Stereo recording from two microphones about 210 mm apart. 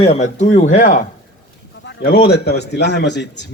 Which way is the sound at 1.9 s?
50° left (ahead or behind).